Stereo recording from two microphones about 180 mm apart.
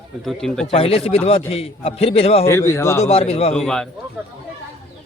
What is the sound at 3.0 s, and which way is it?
Speech, 35° left (ahead or behind).